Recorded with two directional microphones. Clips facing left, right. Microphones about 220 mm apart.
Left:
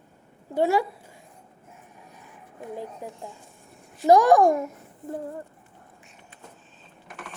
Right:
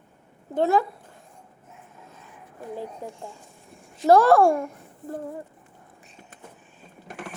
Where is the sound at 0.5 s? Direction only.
10° left (ahead or behind).